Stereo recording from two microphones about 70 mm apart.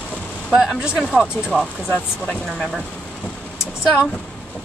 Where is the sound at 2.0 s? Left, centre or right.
Centre.